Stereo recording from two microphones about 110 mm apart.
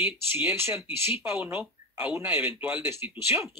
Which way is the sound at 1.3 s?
10° right (ahead or behind).